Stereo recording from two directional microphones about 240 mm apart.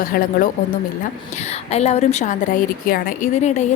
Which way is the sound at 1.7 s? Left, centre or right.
Left.